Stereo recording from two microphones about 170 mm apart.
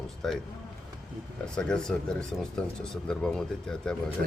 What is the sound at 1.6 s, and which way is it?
Speech, 5° left (ahead or behind).